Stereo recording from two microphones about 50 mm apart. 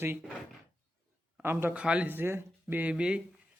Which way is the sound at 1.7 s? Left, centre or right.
Right.